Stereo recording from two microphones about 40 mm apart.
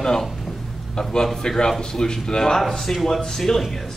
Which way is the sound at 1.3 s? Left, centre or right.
Centre.